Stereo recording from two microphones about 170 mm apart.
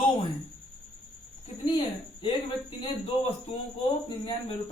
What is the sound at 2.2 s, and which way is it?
Speech, 30° left (ahead or behind).